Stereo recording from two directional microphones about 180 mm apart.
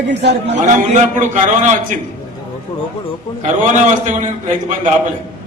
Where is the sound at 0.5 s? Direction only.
40° right (ahead or behind).